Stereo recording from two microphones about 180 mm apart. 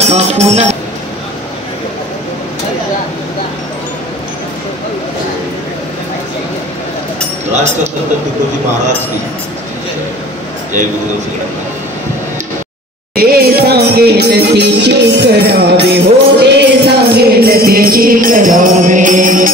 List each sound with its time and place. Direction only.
0.0 s music: 35° right (ahead or behind)
7.5 s music: 40° right (ahead or behind)
13.1 s music: 55° right (ahead or behind)